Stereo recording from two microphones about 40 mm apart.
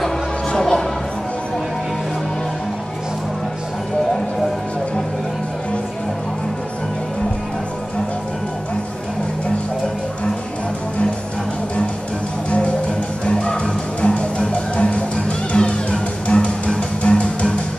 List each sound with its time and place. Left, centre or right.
0.5 s music: centre
12.4 s music: left